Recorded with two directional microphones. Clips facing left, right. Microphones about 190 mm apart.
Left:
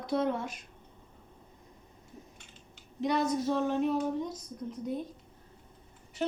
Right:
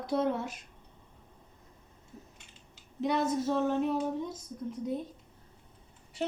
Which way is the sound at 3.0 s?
5° right (ahead or behind).